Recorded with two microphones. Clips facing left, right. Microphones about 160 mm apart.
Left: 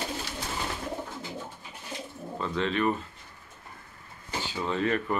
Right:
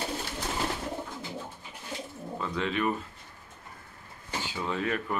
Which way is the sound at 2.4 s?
10° right (ahead or behind).